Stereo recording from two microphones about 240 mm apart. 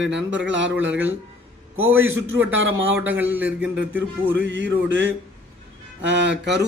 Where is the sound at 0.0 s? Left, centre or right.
Right.